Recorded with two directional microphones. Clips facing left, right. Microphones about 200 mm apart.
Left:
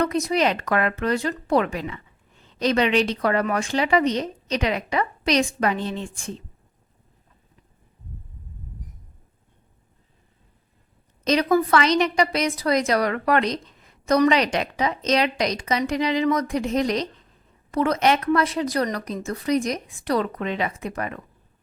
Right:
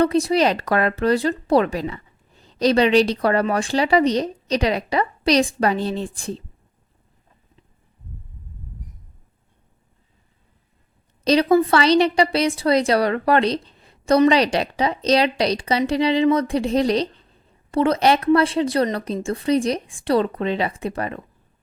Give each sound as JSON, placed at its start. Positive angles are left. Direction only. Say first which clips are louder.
{"t": 0.0, "sound": "speech", "louder": "right 4 dB", "side_deg": -30}
{"t": 11.3, "sound": "speech", "louder": "right 3 dB", "side_deg": -30}